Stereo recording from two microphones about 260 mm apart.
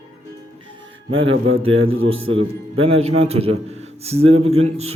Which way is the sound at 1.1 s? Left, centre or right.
Right.